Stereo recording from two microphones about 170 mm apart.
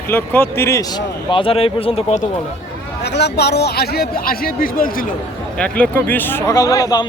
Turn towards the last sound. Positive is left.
turn(degrees=20)  # may be behind; listen again after turning